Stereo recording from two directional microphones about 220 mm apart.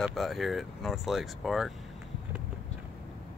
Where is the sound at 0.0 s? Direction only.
Centre (ahead or behind).